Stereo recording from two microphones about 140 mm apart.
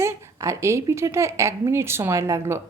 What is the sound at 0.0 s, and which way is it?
A woman's voice, 20° right (ahead or behind).